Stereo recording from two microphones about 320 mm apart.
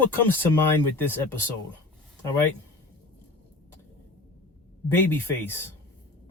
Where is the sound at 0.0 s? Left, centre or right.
Centre.